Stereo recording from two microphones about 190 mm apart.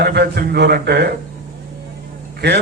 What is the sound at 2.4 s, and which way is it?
Speech, 65° right (ahead or behind).